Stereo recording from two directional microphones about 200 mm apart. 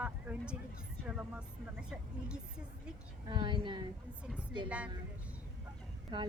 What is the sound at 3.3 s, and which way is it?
Speech, 25° right (ahead or behind).